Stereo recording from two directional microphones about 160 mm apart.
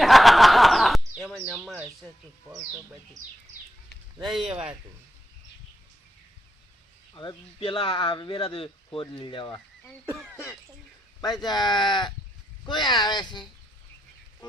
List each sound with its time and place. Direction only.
0.0 s snicker: centre (ahead or behind)
4.2 s speech: centre (ahead or behind)
4.4 s a man's voice: 40° right (ahead or behind)
7.1 s speech: 30° left (ahead or behind)
10.1 s cough: 10° right (ahead or behind)
11.4 s speech: 25° left (ahead or behind)